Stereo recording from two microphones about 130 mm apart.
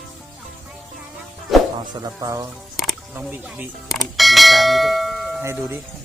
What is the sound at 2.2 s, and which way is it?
Speech, 25° right (ahead or behind).